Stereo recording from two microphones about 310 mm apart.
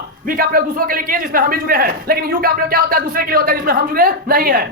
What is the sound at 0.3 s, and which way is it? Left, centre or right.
A man's voice, right.